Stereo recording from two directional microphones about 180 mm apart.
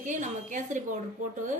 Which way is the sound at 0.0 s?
45° right (ahead or behind).